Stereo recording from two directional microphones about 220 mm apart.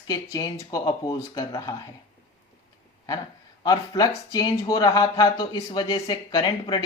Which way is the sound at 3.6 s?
15° left (ahead or behind).